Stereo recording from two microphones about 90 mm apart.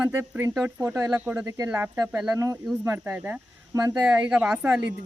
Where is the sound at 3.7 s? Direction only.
40° right (ahead or behind).